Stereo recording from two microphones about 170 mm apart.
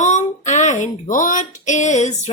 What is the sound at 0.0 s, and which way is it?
Speech, 45° left (ahead or behind).